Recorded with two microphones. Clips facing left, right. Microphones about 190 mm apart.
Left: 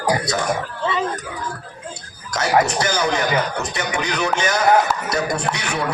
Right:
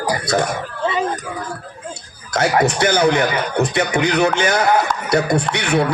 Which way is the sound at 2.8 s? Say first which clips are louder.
Right 5 dB; 60° right (ahead or behind).